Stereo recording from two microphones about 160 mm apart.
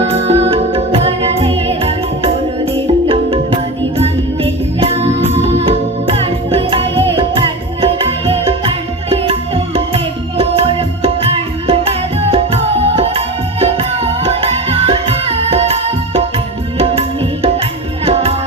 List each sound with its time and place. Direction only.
0.0 s music: 40° right (ahead or behind)